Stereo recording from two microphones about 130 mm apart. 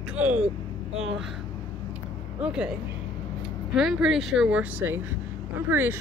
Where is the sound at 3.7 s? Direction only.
5° right (ahead or behind).